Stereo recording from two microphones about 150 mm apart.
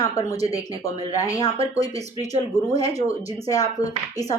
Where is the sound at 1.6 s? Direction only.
45° right (ahead or behind).